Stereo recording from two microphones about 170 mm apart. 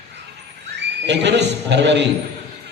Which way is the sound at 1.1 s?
90° right.